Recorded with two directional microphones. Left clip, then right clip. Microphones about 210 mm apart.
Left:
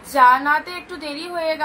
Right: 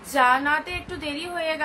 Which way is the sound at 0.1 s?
10° right (ahead or behind).